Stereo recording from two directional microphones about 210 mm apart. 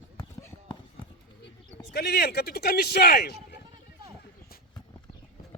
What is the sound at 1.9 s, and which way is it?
Speech, 50° left (ahead or behind).